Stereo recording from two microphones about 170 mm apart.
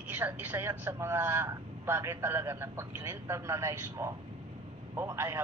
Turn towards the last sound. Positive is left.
turn(degrees=-15)  # may be behind; listen again after turning